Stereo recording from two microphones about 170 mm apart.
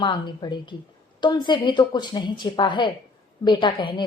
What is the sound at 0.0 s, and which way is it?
A woman's voice, 25° left (ahead or behind).